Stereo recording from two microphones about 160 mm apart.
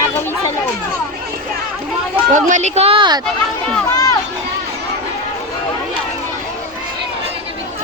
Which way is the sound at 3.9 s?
20° left (ahead or behind).